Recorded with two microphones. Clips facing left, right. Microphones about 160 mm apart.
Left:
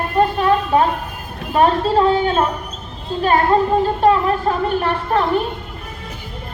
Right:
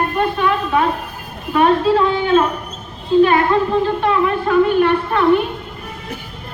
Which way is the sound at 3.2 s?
40° left (ahead or behind).